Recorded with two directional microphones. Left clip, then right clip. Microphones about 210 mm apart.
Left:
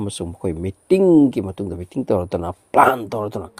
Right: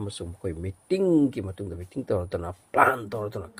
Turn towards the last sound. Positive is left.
turn(degrees=30)  # may be behind; listen again after turning